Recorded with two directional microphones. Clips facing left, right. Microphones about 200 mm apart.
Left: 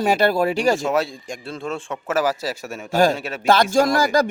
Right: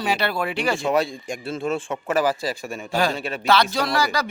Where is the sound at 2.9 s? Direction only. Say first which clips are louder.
Left 6 dB; 45° left (ahead or behind).